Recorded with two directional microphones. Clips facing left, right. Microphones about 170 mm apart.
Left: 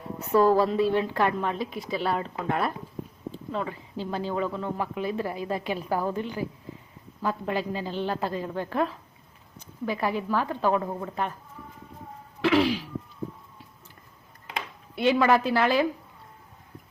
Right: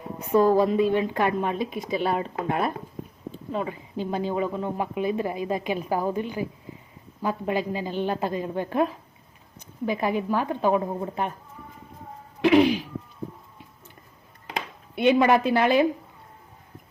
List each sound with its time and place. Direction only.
0.2 s speech: 15° right (ahead or behind)
12.4 s speech: 20° right (ahead or behind)
14.9 s a woman's voice: 20° right (ahead or behind)